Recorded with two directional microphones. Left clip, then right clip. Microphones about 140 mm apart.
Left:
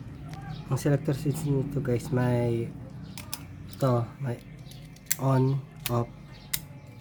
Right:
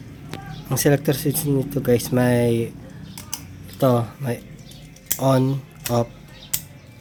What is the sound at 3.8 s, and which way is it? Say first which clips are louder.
Speech: right 9 dB; 25° right (ahead or behind).